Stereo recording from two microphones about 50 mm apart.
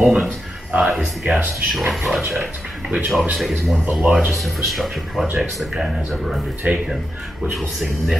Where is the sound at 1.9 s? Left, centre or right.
Centre.